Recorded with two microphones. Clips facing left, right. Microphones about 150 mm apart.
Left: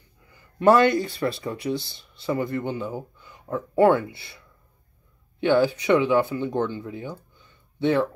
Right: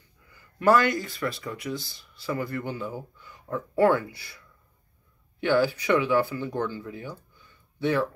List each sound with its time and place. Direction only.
0.3 s speech: 25° left (ahead or behind)
5.4 s speech: 20° left (ahead or behind)